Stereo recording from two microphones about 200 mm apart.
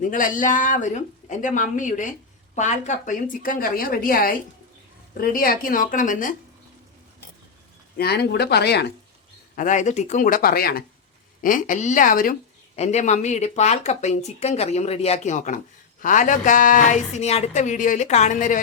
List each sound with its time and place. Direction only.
0.0 s a woman's voice: 40° left (ahead or behind)
7.9 s a woman's voice: 55° left (ahead or behind)
9.6 s speech: 40° left (ahead or behind)
12.7 s speech: 35° left (ahead or behind)